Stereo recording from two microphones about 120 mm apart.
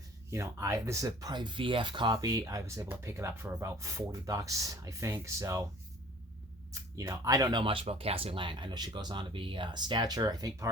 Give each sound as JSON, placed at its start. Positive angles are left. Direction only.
{"t": 0.3, "sound": "speech", "side_deg": -25}
{"t": 6.9, "sound": "speech", "side_deg": -25}
{"t": 7.6, "sound": "speech", "side_deg": -45}